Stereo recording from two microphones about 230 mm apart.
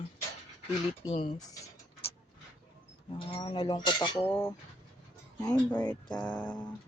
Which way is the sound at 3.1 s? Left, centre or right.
Left.